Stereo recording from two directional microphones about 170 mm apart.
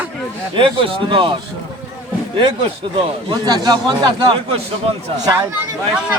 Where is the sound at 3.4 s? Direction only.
25° right (ahead or behind).